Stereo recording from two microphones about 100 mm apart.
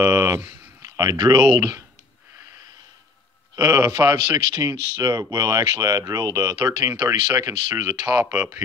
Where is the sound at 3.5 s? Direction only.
25° right (ahead or behind).